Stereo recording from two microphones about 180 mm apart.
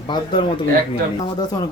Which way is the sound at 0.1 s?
25° left (ahead or behind).